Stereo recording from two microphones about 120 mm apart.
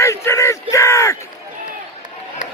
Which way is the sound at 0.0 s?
25° left (ahead or behind).